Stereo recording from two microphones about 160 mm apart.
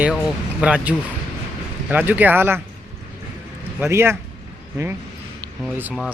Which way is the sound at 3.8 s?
15° right (ahead or behind).